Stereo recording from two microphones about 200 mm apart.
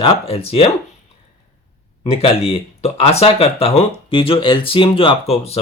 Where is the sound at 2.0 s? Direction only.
30° left (ahead or behind).